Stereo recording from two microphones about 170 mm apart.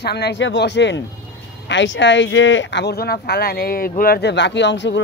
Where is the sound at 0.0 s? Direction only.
70° left (ahead or behind).